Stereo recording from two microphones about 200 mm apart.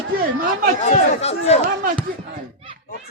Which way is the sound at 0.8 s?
35° left (ahead or behind).